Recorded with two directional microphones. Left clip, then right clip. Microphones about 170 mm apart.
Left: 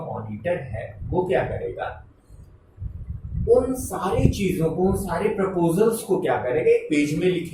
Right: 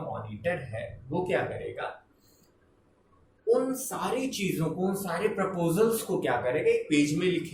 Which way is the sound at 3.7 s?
50° right (ahead or behind).